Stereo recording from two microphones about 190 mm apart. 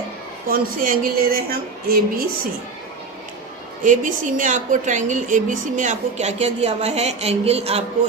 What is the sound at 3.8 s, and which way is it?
A woman's voice, 40° right (ahead or behind).